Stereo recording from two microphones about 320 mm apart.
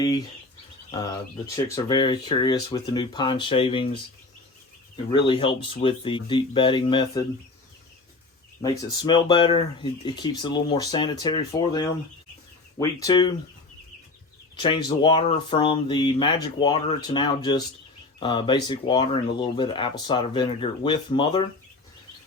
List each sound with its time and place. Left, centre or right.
0.0 s speech: centre
5.1 s speech: centre
8.6 s speech: centre
12.8 s speech: centre
14.5 s speech: centre